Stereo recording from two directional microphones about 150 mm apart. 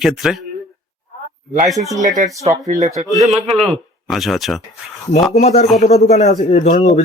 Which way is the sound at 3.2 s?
Centre (ahead or behind).